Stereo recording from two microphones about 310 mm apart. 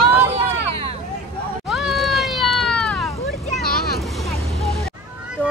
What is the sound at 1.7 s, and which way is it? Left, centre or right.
Cat, centre.